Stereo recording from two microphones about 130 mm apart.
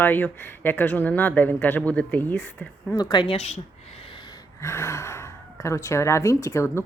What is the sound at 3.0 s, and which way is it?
Speech, 35° left (ahead or behind).